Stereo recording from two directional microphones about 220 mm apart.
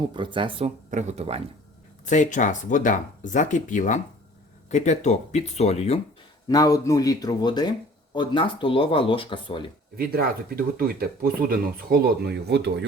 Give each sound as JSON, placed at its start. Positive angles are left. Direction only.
{"t": 0.1, "sound": "speech", "side_deg": -20}
{"t": 2.0, "sound": "speech", "side_deg": 35}
{"t": 6.5, "sound": "speech", "side_deg": 15}
{"t": 10.0, "sound": "speech", "side_deg": -45}